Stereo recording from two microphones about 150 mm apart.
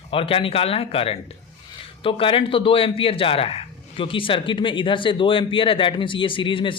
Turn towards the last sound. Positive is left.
turn(degrees=35)  # may be behind; listen again after turning